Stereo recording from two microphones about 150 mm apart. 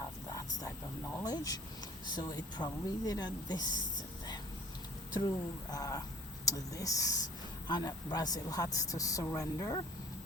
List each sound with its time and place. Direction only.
0.3 s a sound: 25° left (ahead or behind)
1.1 s speech: 25° left (ahead or behind)
5.7 s speech: 25° left (ahead or behind)